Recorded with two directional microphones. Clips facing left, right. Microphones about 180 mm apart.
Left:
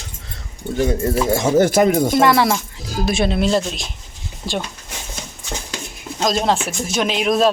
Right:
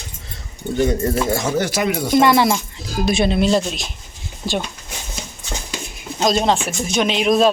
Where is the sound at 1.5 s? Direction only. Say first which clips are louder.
Left 6 dB; 45° left (ahead or behind).